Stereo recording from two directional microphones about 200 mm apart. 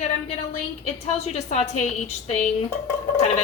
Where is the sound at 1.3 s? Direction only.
35° left (ahead or behind).